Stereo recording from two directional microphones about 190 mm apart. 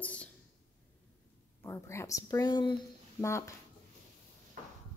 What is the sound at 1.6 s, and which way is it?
Speech, 15° left (ahead or behind).